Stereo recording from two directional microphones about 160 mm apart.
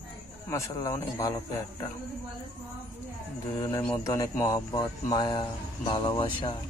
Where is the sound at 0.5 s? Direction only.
20° left (ahead or behind).